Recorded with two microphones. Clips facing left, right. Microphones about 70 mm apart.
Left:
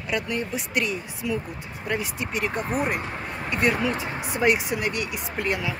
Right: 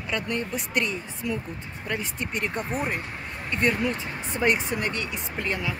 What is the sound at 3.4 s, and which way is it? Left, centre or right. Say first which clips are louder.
Speech: left 1 dB; centre.